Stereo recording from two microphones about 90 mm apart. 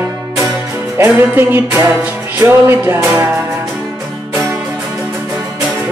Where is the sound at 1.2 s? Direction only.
25° right (ahead or behind).